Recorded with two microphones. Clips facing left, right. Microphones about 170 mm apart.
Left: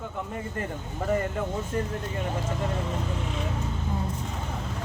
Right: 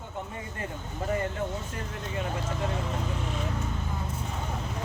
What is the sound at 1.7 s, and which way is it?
Speech, 45° left (ahead or behind).